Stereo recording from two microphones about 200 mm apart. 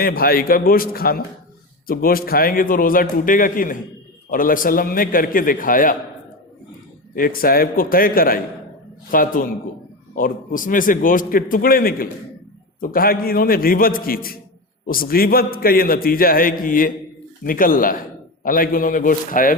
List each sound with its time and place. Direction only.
0.0 s a man's voice: 45° left (ahead or behind)
7.1 s a man's voice: 45° left (ahead or behind)